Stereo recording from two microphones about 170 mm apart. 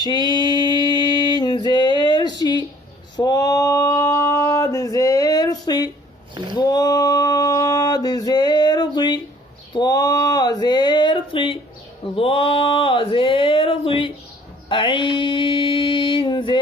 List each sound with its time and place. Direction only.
0.3 s mantra: 25° left (ahead or behind)
0.7 s music: 25° left (ahead or behind)
3.2 s male singing: 20° left (ahead or behind)
6.3 s a sound: 25° right (ahead or behind)
6.6 s a sound: 25° left (ahead or behind)
14.7 s mantra: 30° left (ahead or behind)